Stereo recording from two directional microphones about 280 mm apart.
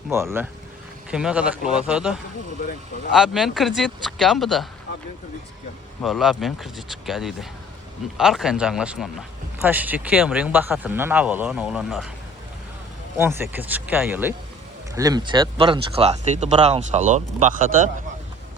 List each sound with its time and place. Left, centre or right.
0.1 s speech: centre
6.0 s speech: centre
13.1 s speech: centre; by 17.9 s right